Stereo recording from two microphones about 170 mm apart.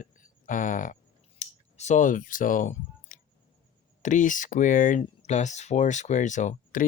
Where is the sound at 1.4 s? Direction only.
45° left (ahead or behind).